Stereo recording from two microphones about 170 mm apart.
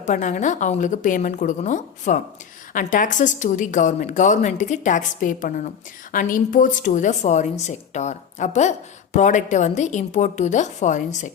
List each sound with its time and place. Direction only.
0.0 s a woman's voice: 45° left (ahead or behind)